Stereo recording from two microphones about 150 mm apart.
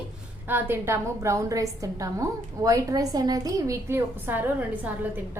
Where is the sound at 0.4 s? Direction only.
15° right (ahead or behind).